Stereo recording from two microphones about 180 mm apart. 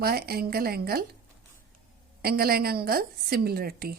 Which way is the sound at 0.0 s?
60° right (ahead or behind).